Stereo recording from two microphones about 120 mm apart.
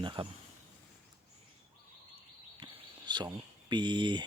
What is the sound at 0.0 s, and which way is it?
Speech, 45° right (ahead or behind).